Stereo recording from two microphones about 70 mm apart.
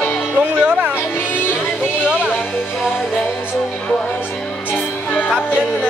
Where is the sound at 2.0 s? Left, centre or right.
Centre.